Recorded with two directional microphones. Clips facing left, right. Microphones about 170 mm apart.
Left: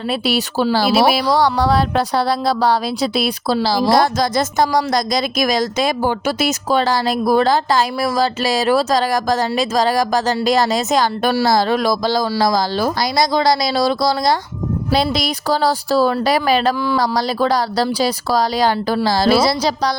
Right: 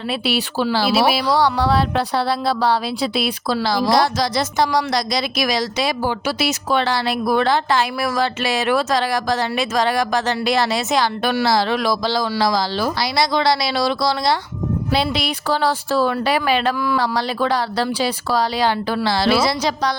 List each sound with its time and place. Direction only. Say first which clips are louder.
0.1 s speech: left 2 dB; 40° left (ahead or behind)
3.9 s speech: left 2 dB; 50° left (ahead or behind)